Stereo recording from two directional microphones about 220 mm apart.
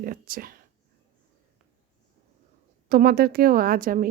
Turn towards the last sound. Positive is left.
turn(degrees=-40)  # may be behind; listen again after turning